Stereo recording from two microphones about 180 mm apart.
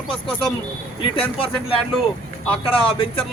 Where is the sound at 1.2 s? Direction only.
30° left (ahead or behind).